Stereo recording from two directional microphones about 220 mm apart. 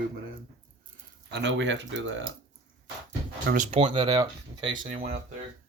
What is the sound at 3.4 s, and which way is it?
Speech, 35° right (ahead or behind).